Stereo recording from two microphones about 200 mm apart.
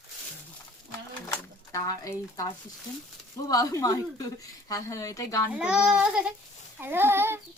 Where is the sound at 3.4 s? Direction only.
15° left (ahead or behind).